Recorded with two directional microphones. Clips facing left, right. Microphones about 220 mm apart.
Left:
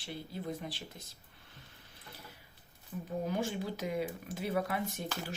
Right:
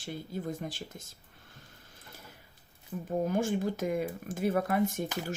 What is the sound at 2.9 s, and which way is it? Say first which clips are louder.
Speech: right 5 dB; 50° right (ahead or behind).